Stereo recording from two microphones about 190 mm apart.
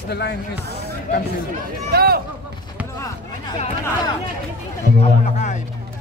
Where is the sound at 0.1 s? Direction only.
60° left (ahead or behind).